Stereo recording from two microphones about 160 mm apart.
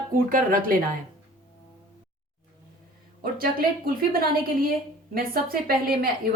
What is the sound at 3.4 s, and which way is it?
A woman's voice, 65° right (ahead or behind).